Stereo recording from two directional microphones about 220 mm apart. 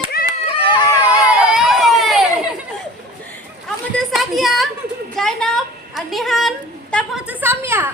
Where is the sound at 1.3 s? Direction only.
5° right (ahead or behind).